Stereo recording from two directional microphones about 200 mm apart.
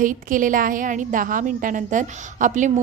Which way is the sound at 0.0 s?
40° right (ahead or behind).